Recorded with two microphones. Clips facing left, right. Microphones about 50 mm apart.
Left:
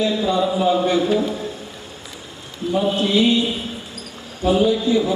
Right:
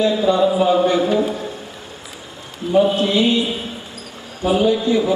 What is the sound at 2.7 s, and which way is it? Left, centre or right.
A man's voice, centre.